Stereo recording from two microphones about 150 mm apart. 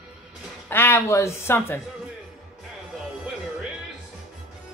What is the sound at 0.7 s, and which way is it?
Speech, 15° left (ahead or behind).